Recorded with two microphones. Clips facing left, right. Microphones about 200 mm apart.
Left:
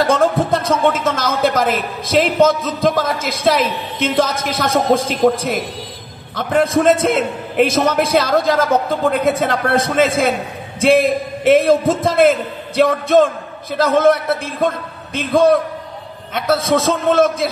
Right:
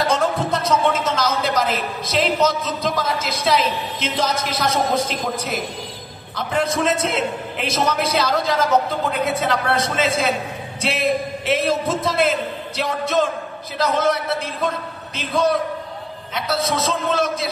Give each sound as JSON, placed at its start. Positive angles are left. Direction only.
{"t": 0.0, "sound": "speech", "side_deg": 50}